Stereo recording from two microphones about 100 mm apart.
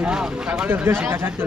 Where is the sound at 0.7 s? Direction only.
20° right (ahead or behind).